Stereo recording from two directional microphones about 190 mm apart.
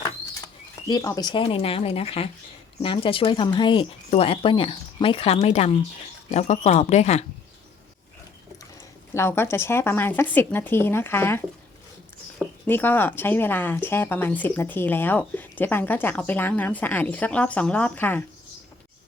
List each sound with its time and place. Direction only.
0.4 s speech: 20° left (ahead or behind); by 7.3 s 35° left (ahead or behind)
9.1 s speech: 15° left (ahead or behind)
12.6 s speech: 10° left (ahead or behind)